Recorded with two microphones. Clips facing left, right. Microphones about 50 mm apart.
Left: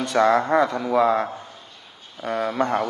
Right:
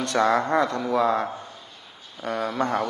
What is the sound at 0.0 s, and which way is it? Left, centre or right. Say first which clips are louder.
A man's voice: left 3 dB; centre.